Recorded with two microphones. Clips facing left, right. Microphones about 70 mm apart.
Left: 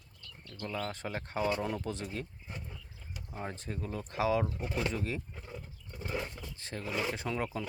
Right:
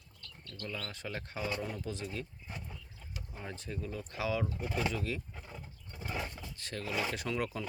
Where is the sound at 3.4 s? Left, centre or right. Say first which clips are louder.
Left 2 dB; left.